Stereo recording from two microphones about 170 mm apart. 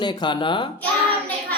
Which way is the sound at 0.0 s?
25° left (ahead or behind).